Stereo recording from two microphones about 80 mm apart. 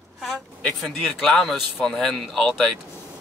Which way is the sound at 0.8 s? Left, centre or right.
Centre.